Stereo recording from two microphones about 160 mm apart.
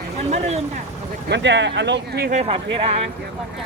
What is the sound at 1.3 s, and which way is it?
Speech, 90° right.